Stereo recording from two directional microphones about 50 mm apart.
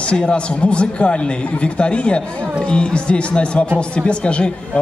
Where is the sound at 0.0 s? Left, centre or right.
Centre.